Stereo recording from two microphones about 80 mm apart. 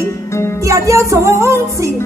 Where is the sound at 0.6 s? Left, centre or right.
Right.